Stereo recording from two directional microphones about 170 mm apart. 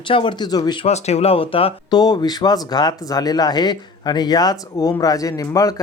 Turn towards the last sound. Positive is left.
turn(degrees=20)  # may be behind; listen again after turning